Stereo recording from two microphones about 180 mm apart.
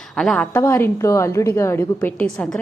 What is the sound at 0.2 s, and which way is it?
A woman's voice, 5° left (ahead or behind).